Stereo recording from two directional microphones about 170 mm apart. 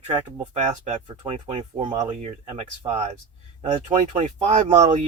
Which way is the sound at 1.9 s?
25° right (ahead or behind).